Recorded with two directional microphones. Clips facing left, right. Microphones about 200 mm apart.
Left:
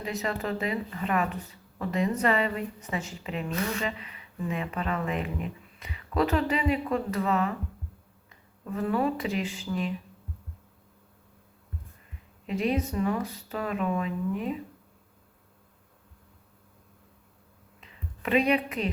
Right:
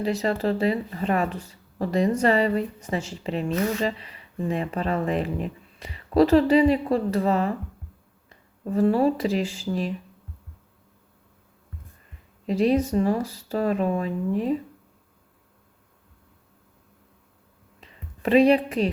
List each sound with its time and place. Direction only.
0.0 s speech: 30° right (ahead or behind)
12.5 s speech: 35° right (ahead or behind)
17.7 s music: 35° right (ahead or behind)